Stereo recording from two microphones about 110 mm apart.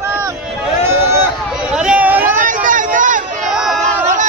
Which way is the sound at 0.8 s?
20° right (ahead or behind).